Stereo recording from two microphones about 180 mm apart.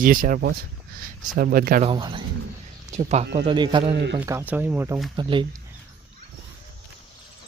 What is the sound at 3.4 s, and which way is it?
Speech, 25° right (ahead or behind).